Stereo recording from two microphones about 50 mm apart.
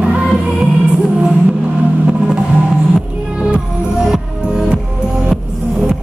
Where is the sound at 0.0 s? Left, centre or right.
Right.